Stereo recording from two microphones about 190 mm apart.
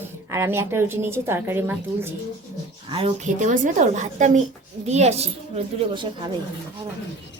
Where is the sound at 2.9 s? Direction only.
30° right (ahead or behind).